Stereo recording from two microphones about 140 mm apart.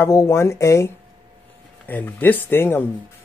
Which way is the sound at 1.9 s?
15° left (ahead or behind).